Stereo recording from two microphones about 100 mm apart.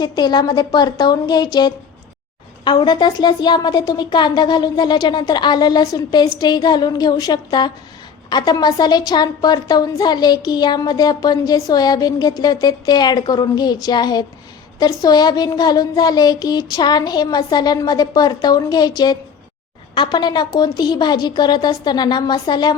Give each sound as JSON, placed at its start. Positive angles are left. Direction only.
{"t": 0.0, "sound": "a woman's voice", "side_deg": 45}